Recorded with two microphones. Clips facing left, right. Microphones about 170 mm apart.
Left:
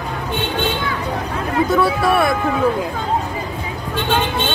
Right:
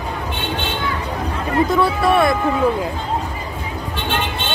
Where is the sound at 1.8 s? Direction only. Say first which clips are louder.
Even; 5° left (ahead or behind).